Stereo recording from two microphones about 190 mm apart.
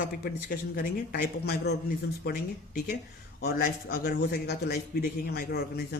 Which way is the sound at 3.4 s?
50° left (ahead or behind).